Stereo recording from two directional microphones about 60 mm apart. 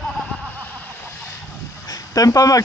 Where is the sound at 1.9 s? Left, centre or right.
Left.